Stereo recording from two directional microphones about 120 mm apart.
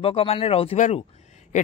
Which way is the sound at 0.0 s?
55° left (ahead or behind).